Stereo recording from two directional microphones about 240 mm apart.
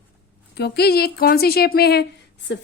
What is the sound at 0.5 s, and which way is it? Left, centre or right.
Speech, left.